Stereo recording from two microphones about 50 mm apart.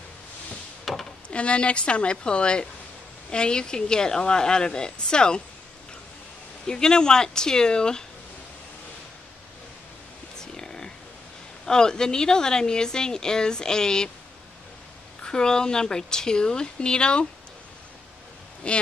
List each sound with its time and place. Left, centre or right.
0.9 s a sound: centre
1.3 s a woman's voice: left
6.7 s a woman's voice: centre
10.3 s a sound: centre
11.6 s a woman's voice: centre
15.2 s a woman's voice: centre
18.6 s speech: left